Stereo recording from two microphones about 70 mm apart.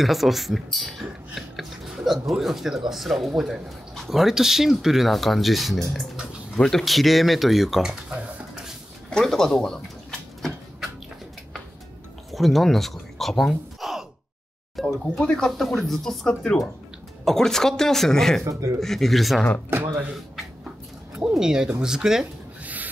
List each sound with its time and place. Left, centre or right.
0.0 s speech: centre
1.3 s a sound: centre
2.2 s speech: centre
8.1 s a sound: right
9.1 s speech: centre
12.3 s gasp: centre
14.8 s a sound: centre
15.2 s speech: centre
18.4 s speech: right
18.8 s speech: centre
21.3 s speech: centre
22.6 s rub: right